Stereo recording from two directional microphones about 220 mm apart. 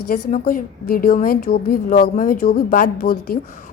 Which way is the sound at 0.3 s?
40° left (ahead or behind).